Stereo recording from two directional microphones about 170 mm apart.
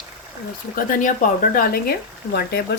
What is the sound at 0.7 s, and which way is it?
Speech, 55° left (ahead or behind).